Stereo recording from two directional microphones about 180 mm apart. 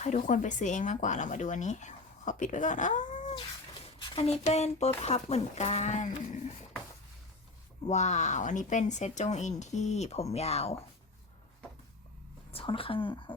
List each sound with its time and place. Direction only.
0.0 s speech: 45° left (ahead or behind)
7.9 s speech: 40° left (ahead or behind)
12.5 s speech: 30° left (ahead or behind)